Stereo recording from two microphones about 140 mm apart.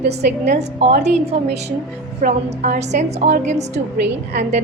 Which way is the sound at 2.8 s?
55° right (ahead or behind).